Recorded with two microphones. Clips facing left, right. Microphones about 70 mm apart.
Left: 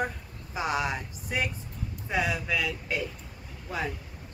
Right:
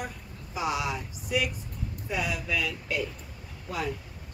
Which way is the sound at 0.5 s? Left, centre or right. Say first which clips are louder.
Left 1 dB; left.